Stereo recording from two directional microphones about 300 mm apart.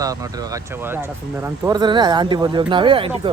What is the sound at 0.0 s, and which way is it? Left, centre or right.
Speech, centre.